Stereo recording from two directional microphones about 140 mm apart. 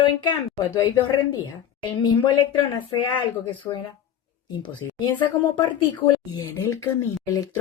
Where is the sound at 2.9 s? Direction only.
35° left (ahead or behind).